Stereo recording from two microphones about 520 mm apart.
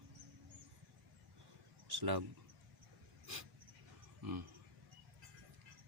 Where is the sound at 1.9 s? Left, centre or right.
Right.